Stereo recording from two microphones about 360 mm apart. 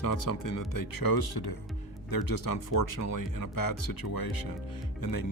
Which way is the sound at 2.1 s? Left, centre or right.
Left.